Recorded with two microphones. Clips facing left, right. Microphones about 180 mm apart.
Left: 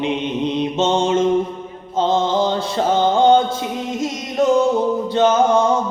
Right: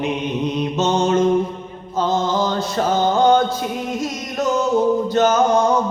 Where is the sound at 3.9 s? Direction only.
25° left (ahead or behind).